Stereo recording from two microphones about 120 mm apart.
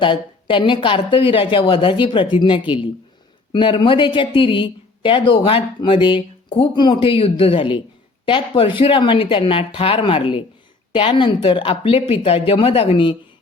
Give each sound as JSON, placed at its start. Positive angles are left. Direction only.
{"t": 0.0, "sound": "speech", "side_deg": 45}